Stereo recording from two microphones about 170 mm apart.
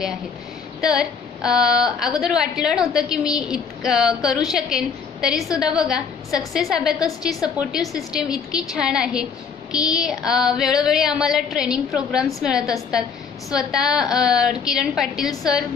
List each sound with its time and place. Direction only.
0.7 s a woman's voice: 5° right (ahead or behind)
15.2 s a woman's voice: 20° left (ahead or behind)